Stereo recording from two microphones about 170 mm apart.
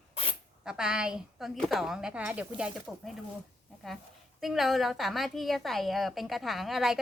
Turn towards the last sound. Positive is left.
turn(degrees=0)  # may be behind; listen again after turning